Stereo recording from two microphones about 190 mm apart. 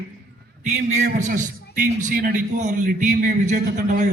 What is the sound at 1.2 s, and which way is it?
A man's voice, 45° right (ahead or behind).